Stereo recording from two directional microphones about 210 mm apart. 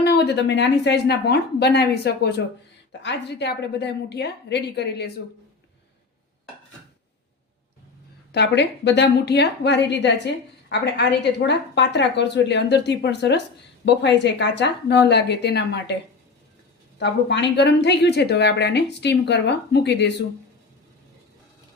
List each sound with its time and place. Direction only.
0.0 s a woman's voice: 50° left (ahead or behind)
8.3 s a woman's voice: 55° left (ahead or behind)
17.0 s a woman's voice: 55° left (ahead or behind)